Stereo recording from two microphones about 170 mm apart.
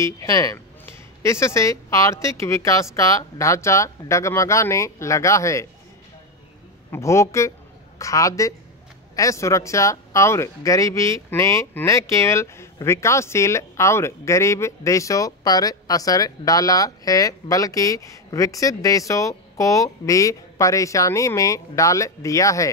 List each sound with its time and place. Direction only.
0.0 s speech: 20° left (ahead or behind)
6.9 s speech: 15° left (ahead or behind)